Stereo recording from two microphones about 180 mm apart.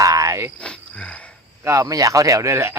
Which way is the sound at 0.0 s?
20° right (ahead or behind).